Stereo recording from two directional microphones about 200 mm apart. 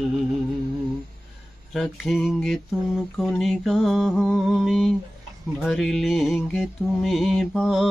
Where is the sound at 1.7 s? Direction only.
Centre (ahead or behind).